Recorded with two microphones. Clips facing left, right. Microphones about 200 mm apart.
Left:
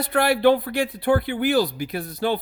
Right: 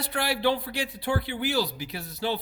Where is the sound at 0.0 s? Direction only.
55° left (ahead or behind).